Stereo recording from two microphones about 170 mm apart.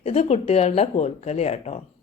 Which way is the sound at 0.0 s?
40° left (ahead or behind).